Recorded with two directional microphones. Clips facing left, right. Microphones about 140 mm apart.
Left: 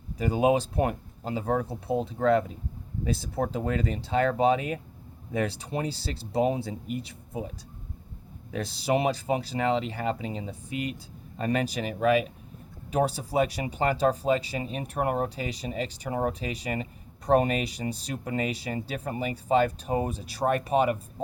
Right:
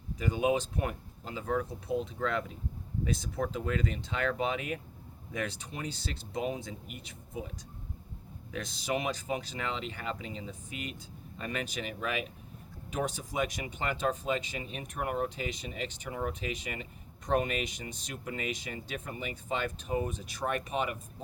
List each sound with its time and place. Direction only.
0.2 s speech: 35° left (ahead or behind)